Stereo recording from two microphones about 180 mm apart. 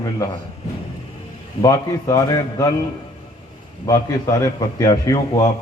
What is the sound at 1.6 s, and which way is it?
A man's voice, 20° left (ahead or behind).